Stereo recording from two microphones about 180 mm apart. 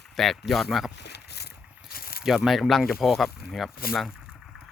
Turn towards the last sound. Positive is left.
turn(degrees=-5)  # may be behind; listen again after turning